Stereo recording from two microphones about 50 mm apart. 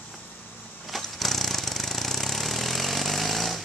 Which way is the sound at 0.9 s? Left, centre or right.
Centre.